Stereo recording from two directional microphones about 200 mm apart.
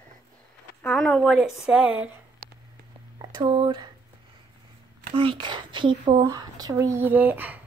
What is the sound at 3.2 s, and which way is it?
Speech, 20° right (ahead or behind).